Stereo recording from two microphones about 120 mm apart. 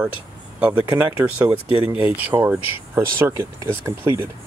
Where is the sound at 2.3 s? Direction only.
35° right (ahead or behind).